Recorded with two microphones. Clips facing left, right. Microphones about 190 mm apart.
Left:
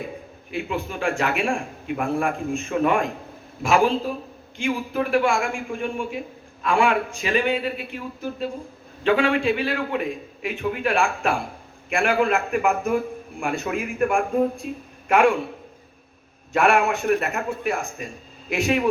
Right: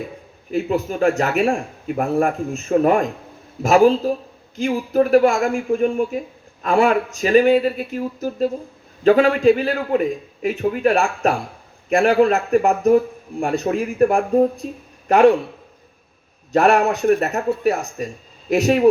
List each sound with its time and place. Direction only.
0.5 s a woman's voice: 40° right (ahead or behind)
16.5 s a woman's voice: 40° right (ahead or behind)